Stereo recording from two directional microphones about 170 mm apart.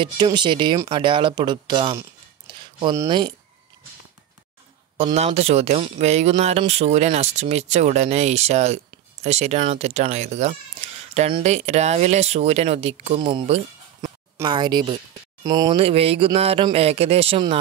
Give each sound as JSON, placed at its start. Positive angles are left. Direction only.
{"t": 0.0, "sound": "speech", "side_deg": -25}
{"t": 2.0, "sound": "a sound", "side_deg": -25}
{"t": 4.9, "sound": "speech", "side_deg": -35}
{"t": 15.8, "sound": "speech", "side_deg": -35}